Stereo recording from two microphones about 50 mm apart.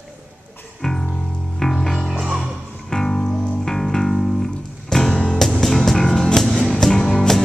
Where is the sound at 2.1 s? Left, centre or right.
Centre.